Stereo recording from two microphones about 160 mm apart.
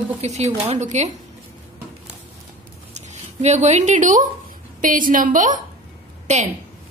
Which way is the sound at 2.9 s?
45° right (ahead or behind).